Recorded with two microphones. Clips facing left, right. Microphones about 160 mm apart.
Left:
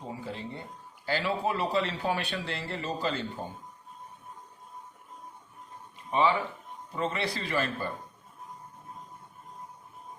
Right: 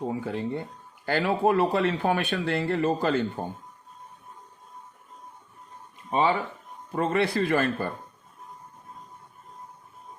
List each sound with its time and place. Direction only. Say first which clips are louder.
0.1 s speech: right 8 dB; 55° right (ahead or behind)
6.1 s speech: right 2 dB; 40° right (ahead or behind)
6.9 s a man's voice: right 7 dB; 55° right (ahead or behind)